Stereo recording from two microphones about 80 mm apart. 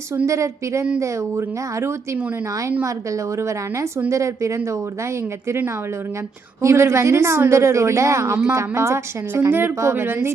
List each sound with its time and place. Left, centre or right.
0.3 s a woman's voice: right
4.1 s a woman's voice: right
6.6 s a woman's voice: right
9.5 s a woman's voice: right